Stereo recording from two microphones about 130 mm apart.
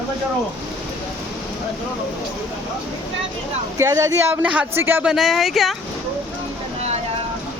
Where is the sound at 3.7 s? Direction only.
25° right (ahead or behind).